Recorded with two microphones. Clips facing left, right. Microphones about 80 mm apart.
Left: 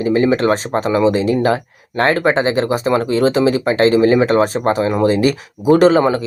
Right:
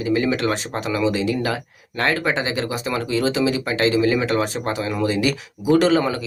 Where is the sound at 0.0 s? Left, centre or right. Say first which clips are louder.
Left 6 dB; left.